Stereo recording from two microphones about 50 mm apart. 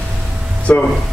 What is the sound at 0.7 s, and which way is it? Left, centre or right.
Speech, left.